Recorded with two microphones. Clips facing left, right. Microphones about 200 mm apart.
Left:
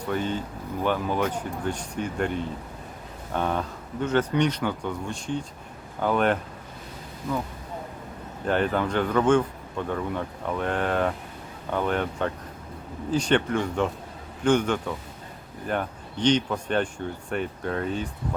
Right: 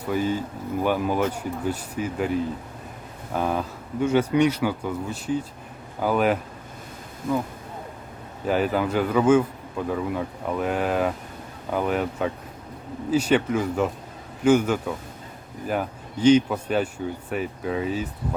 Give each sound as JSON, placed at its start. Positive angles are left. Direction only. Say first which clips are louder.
{"t": 0.1, "sound": "speech", "louder": "right 4 dB", "side_deg": -5}
{"t": 7.2, "sound": "speech", "louder": "right 4 dB", "side_deg": -50}
{"t": 8.4, "sound": "speech", "louder": "right 2 dB", "side_deg": -5}